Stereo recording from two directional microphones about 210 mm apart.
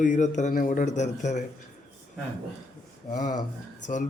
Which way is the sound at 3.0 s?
35° left (ahead or behind).